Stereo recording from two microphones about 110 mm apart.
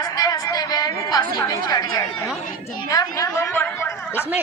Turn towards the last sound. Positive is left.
turn(degrees=20)  # may be behind; listen again after turning